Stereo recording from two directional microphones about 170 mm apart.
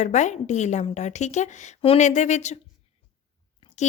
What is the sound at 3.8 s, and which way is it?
Speech, 40° left (ahead or behind).